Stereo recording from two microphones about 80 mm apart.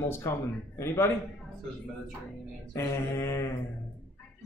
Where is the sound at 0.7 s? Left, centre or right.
Left.